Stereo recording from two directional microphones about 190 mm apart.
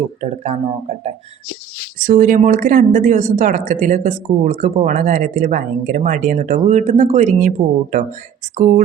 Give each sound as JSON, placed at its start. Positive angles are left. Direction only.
{"t": 0.2, "sound": "speech", "side_deg": -35}